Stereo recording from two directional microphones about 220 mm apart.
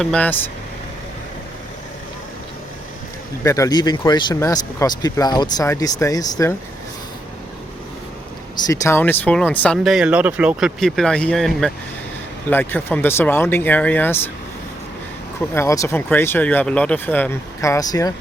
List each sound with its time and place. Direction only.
0.0 s speech: 5° left (ahead or behind)
3.4 s speech: 15° left (ahead or behind)
8.5 s speech: 15° left (ahead or behind)
15.5 s speech: 15° left (ahead or behind)